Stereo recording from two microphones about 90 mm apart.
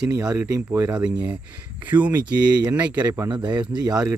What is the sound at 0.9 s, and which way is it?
Speech, 10° right (ahead or behind).